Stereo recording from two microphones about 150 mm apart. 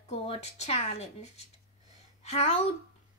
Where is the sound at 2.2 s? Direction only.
45° left (ahead or behind).